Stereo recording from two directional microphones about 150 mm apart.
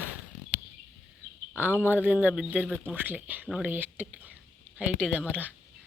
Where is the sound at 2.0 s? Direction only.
10° right (ahead or behind).